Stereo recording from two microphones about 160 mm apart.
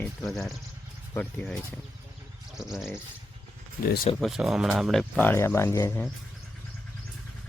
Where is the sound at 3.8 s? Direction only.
65° left (ahead or behind).